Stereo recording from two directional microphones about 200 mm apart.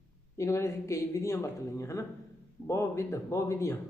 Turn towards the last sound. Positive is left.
turn(degrees=15)  # may be behind; listen again after turning